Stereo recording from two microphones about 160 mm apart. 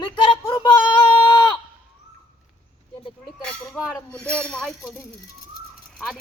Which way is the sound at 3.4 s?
Centre (ahead or behind).